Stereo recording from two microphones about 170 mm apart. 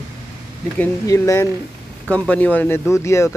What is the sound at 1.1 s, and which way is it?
Speech, 20° left (ahead or behind).